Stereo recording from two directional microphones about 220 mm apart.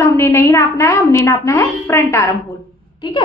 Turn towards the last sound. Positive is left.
turn(degrees=20)  # may be behind; listen again after turning